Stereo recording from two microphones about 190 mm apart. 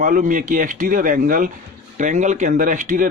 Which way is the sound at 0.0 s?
45° right (ahead or behind).